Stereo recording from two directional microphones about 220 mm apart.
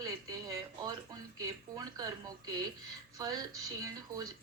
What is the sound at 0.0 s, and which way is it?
Music, 15° right (ahead or behind).